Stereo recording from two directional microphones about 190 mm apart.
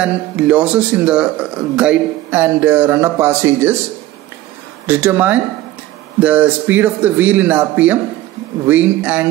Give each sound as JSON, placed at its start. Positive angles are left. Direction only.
{"t": 0.0, "sound": "speech", "side_deg": -5}
{"t": 4.8, "sound": "speech", "side_deg": -10}